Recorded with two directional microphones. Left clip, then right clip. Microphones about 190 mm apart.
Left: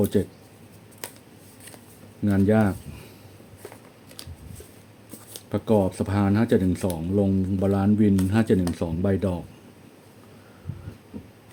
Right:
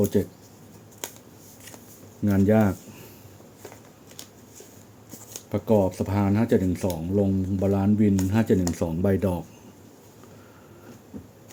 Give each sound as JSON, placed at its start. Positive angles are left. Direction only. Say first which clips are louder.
{"t": 0.0, "sound": "speech", "louder": "even", "side_deg": 15}
{"t": 1.0, "sound": "scissors", "louder": "right 1 dB", "side_deg": 15}
{"t": 2.2, "sound": "speech", "louder": "even", "side_deg": 0}
{"t": 5.5, "sound": "speech", "louder": "even", "side_deg": 15}
{"t": 8.7, "sound": "speech", "louder": "right 1 dB", "side_deg": 0}